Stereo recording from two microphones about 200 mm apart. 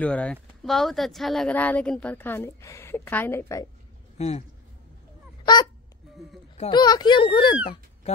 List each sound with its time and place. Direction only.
0.0 s speech: 5° left (ahead or behind)
4.2 s speech: 30° left (ahead or behind)
5.4 s honk: 20° left (ahead or behind)
6.6 s speech: 20° left (ahead or behind)
7.6 s cat: 30° left (ahead or behind)